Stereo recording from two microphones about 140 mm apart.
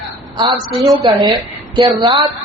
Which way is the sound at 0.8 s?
Centre (ahead or behind).